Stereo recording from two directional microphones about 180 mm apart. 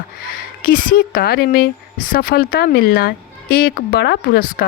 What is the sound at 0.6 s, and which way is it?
A woman's voice, 50° left (ahead or behind).